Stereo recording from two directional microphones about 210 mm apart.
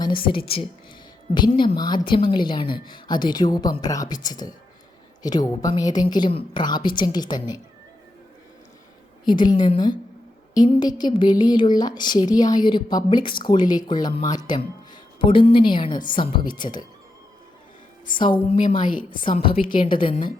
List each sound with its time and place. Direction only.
0.2 s speech: 25° left (ahead or behind)
9.2 s speech: 20° left (ahead or behind)
18.2 s speech: 20° left (ahead or behind)
18.8 s a woman's voice: 40° left (ahead or behind)
19.5 s speech: 25° left (ahead or behind)